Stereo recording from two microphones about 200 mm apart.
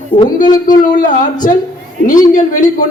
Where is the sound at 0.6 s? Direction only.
40° left (ahead or behind).